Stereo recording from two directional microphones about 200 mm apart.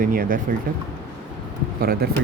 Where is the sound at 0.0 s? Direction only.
45° right (ahead or behind).